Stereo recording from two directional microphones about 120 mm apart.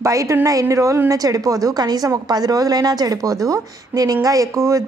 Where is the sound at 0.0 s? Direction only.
25° right (ahead or behind).